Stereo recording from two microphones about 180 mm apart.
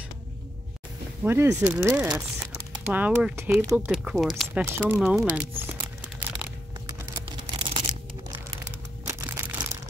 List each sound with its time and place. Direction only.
1.2 s speech: 15° right (ahead or behind)
5.6 s crumpling: 10° right (ahead or behind)
7.2 s tearing: 25° right (ahead or behind)
9.0 s a sound: 15° right (ahead or behind)